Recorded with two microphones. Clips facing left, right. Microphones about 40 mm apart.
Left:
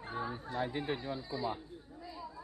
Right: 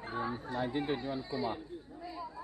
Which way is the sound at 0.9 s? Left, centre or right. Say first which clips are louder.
Right 2 dB; right.